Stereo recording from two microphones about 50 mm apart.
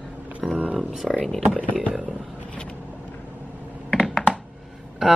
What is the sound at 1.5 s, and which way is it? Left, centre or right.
Speech, left.